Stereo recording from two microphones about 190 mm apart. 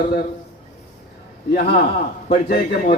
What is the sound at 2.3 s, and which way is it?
Speech, 50° left (ahead or behind).